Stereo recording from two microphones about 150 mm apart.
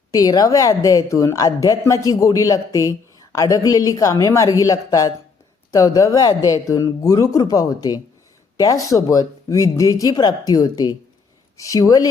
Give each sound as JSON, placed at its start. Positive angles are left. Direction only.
{"t": 0.1, "sound": "a woman's voice", "side_deg": 25}